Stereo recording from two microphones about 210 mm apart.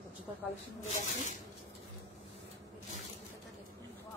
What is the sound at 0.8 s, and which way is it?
Speech, 35° left (ahead or behind).